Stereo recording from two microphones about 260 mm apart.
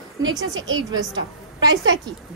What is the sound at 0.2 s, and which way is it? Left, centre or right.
Speech, centre.